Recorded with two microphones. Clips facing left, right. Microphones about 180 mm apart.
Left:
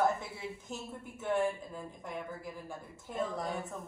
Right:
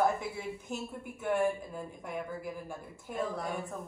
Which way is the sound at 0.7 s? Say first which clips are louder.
Right 4 dB; 15° right (ahead or behind).